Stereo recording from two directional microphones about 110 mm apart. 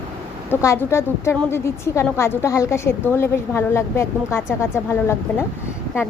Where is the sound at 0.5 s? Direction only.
25° left (ahead or behind).